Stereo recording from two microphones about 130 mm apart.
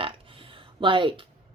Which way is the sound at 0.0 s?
40° right (ahead or behind).